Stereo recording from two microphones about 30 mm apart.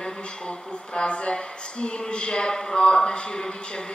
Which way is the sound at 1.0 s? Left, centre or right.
Left.